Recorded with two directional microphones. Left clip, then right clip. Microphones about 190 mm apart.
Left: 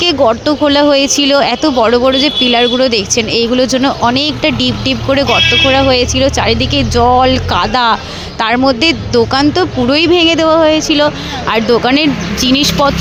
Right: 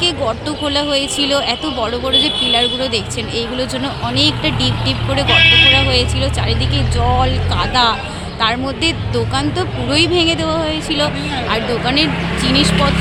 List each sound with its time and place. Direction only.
0.0 s speech: 45° left (ahead or behind)